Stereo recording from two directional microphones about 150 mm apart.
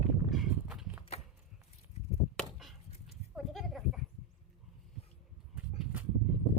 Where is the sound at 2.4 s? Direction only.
Centre (ahead or behind).